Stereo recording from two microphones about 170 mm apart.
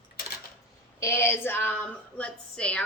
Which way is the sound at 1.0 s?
15° left (ahead or behind).